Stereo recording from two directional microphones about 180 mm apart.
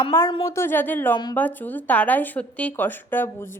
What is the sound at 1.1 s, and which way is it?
Speech, 25° left (ahead or behind).